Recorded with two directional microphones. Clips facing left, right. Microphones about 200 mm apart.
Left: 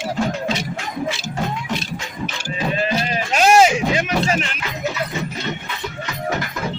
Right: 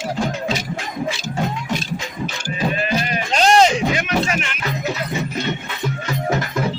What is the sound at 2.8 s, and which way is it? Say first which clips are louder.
Music: even; 30° left (ahead or behind).